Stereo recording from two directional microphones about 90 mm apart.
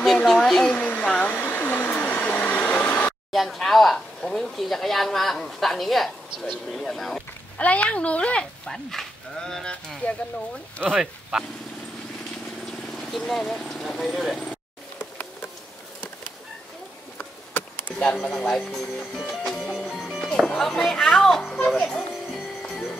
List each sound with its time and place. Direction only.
0.0 s speech: 5° left (ahead or behind)
1.3 s hair dryer: 25° left (ahead or behind)
3.3 s speech: centre (ahead or behind)
7.5 s speech: 15° left (ahead or behind)
10.9 s speech: 10° right (ahead or behind)
13.2 s speech: 5° left (ahead or behind)
15.0 s insect: 25° left (ahead or behind)
17.2 s a sound: 25° left (ahead or behind)
18.0 s speech: 15° left (ahead or behind)
18.8 s speech: 5° left (ahead or behind)
19.7 s music: centre (ahead or behind)
20.2 s speech: 5° left (ahead or behind)